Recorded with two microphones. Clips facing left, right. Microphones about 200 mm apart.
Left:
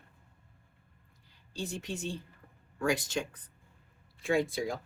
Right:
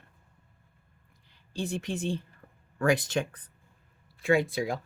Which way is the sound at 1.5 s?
60° right (ahead or behind).